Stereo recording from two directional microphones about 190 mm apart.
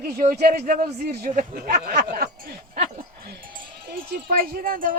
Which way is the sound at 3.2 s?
55° right (ahead or behind).